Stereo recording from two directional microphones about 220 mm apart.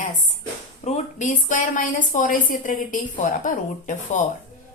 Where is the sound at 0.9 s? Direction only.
30° left (ahead or behind).